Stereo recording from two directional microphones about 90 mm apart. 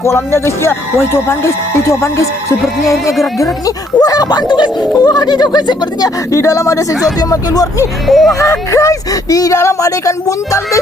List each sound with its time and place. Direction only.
0.0 s speech: 30° left (ahead or behind)
4.0 s speech: 45° left (ahead or behind)
6.3 s speech: 35° left (ahead or behind)
8.0 s speech: centre (ahead or behind)
8.4 s speech: 35° left (ahead or behind)